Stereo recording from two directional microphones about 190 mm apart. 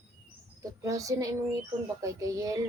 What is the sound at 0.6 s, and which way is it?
A woman's voice, 15° right (ahead or behind).